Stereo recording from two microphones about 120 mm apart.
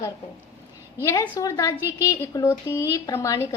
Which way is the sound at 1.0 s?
30° left (ahead or behind).